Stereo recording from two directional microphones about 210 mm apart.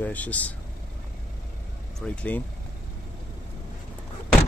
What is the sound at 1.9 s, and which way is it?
Speech, 5° left (ahead or behind).